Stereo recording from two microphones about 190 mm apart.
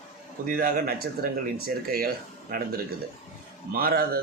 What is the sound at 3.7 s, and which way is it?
Speech, 50° right (ahead or behind).